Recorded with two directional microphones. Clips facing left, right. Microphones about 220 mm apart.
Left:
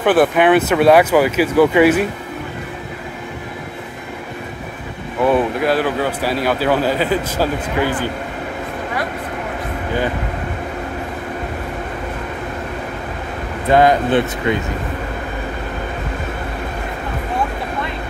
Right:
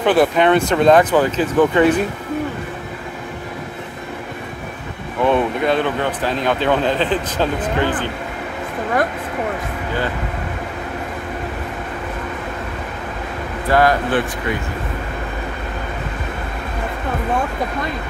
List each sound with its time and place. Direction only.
0.0 s speech: 5° left (ahead or behind)
5.2 s speech: 5° left (ahead or behind)
13.7 s speech: 20° left (ahead or behind)